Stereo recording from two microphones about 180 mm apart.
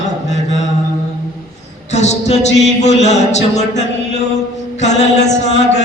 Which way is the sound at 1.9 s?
40° left (ahead or behind).